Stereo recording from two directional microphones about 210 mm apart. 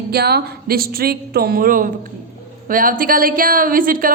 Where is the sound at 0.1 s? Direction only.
50° right (ahead or behind).